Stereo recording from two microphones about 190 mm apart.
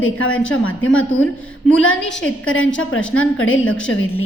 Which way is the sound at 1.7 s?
5° left (ahead or behind).